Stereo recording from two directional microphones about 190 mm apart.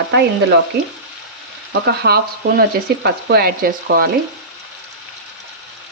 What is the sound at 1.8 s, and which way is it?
Speech, 55° right (ahead or behind).